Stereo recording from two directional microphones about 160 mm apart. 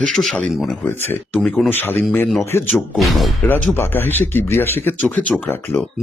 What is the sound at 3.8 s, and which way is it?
Speech, 15° left (ahead or behind).